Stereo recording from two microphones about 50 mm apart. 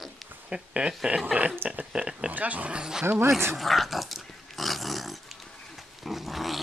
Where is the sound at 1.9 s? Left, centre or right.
Centre.